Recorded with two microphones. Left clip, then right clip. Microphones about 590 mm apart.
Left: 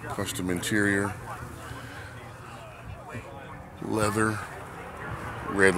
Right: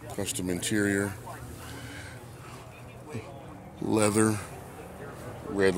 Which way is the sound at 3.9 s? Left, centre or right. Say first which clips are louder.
Right 1 dB; right.